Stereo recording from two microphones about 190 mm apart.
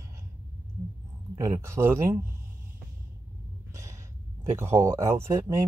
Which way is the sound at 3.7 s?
15° right (ahead or behind).